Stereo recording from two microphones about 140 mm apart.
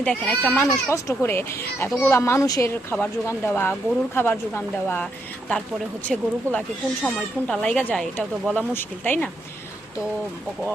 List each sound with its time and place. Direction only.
0.0 s speech: 10° left (ahead or behind)
6.1 s speech: centre (ahead or behind)
6.5 s speech: 20° right (ahead or behind)
7.0 s speech: 5° left (ahead or behind)